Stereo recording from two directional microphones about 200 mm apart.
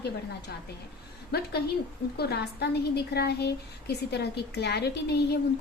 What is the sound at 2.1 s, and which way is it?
A woman's voice, 55° left (ahead or behind).